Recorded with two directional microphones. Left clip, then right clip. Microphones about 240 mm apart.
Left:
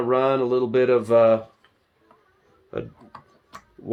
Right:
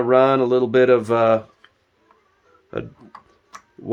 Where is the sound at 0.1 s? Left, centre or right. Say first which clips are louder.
Right 5 dB; right.